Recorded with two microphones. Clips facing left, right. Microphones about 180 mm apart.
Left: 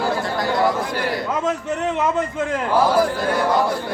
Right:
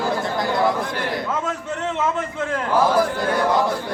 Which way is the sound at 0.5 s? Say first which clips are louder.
Left 2 dB; 5° left (ahead or behind).